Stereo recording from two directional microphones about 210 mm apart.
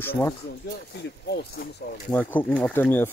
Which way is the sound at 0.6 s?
50° left (ahead or behind).